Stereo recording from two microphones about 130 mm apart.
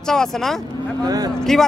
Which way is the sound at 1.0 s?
30° right (ahead or behind).